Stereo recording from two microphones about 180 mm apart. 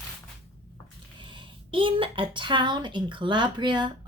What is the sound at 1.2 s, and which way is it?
A child's voice, 25° right (ahead or behind).